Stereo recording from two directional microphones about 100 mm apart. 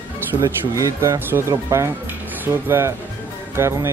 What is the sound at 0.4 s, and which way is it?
Speech, 30° right (ahead or behind).